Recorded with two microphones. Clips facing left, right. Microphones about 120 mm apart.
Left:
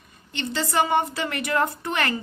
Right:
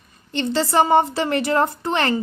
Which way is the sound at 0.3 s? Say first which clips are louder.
Right 6 dB; 35° right (ahead or behind).